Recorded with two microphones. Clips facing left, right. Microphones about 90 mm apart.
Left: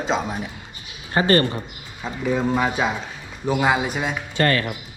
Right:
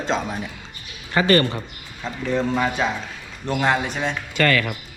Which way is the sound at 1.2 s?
30° left (ahead or behind).